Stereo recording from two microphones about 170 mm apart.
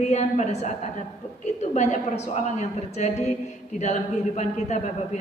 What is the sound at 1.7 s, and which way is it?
A woman's voice, 40° left (ahead or behind).